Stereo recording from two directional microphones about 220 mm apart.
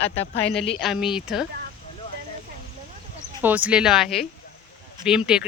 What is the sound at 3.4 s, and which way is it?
Speech, 5° right (ahead or behind).